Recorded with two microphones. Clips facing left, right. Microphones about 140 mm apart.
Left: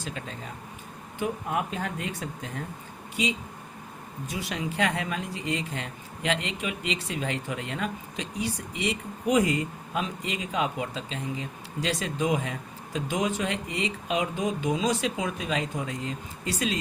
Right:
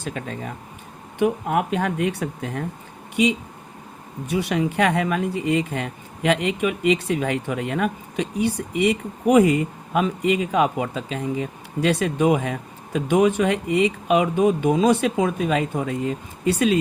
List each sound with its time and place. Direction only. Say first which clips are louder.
0.0 s speech: right 7 dB; 55° right (ahead or behind)
1.2 s speech: right 8 dB; 65° right (ahead or behind)
4.3 s speech: right 10 dB; 65° right (ahead or behind)